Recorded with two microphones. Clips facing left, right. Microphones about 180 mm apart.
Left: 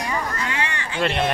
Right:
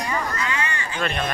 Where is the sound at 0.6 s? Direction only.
75° left (ahead or behind).